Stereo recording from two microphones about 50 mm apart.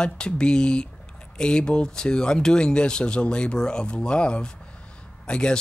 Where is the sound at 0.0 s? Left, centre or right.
Centre.